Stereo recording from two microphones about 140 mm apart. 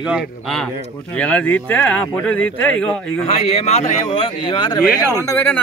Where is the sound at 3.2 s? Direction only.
50° left (ahead or behind); by 5.0 s 30° left (ahead or behind).